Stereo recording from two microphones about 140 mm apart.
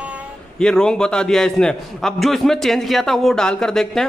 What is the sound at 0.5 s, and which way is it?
Speech, 5° left (ahead or behind).